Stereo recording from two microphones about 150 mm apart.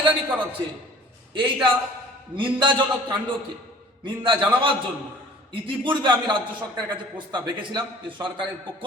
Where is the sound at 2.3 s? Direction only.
30° right (ahead or behind).